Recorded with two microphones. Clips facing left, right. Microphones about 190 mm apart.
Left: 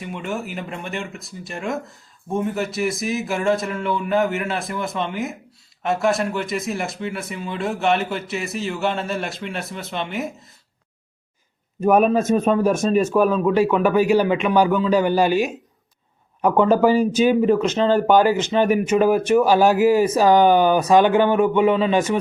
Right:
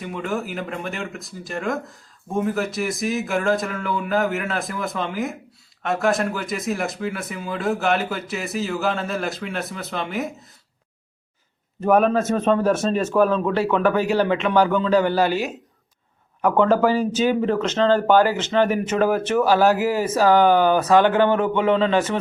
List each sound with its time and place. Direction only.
0.0 s speech: centre (ahead or behind)
11.8 s speech: 15° left (ahead or behind)